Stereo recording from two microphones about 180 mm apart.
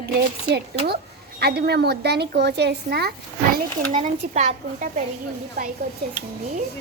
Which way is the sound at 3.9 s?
40° right (ahead or behind).